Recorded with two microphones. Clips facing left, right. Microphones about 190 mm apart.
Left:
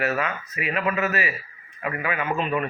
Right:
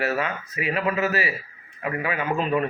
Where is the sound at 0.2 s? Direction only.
35° right (ahead or behind).